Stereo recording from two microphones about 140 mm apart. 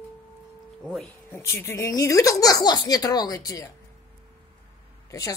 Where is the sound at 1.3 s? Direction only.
20° left (ahead or behind).